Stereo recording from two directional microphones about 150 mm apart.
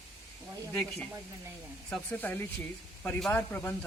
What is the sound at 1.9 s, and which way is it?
Speech, 10° left (ahead or behind).